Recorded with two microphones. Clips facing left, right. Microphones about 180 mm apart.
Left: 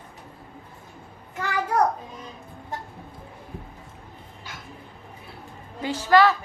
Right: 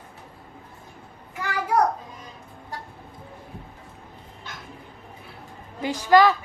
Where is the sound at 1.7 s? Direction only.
10° right (ahead or behind).